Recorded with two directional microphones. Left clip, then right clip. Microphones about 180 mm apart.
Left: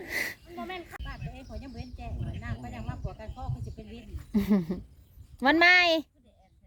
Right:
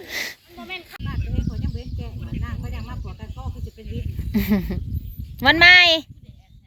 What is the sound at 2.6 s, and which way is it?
Speech, 15° left (ahead or behind).